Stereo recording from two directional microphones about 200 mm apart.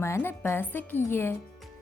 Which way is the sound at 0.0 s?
10° left (ahead or behind).